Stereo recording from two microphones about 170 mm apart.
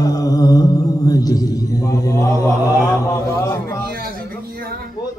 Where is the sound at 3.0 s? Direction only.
20° left (ahead or behind).